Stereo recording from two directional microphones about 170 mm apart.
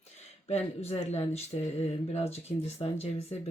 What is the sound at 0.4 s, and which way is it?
Speech, 35° left (ahead or behind).